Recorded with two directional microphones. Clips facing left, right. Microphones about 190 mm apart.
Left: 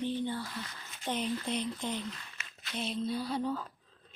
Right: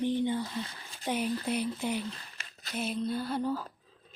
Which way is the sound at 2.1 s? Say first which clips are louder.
Right 1 dB; 35° right (ahead or behind).